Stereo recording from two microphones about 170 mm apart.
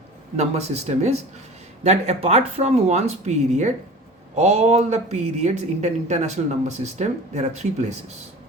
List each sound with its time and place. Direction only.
0.3 s speech: 40° right (ahead or behind)